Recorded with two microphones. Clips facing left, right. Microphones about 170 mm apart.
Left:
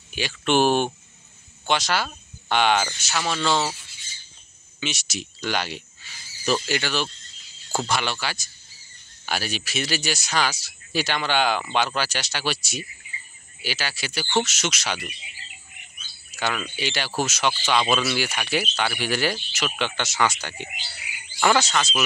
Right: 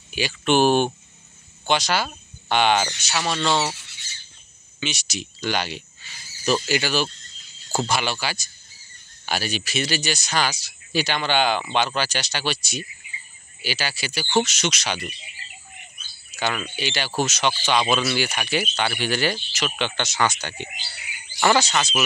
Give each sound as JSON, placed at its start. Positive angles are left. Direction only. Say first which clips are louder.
{"t": 0.1, "sound": "speech", "louder": "right 2 dB", "side_deg": 0}
{"t": 3.9, "sound": "bird", "louder": "right 2 dB", "side_deg": -70}
{"t": 4.7, "sound": "speech", "louder": "right 1 dB", "side_deg": 5}
{"t": 16.3, "sound": "speech", "louder": "right 1 dB", "side_deg": -5}